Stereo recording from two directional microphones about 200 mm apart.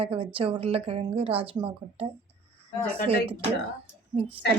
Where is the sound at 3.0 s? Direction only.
30° right (ahead or behind).